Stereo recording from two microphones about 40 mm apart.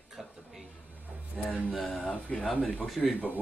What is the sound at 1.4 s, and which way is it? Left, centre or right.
Music, centre.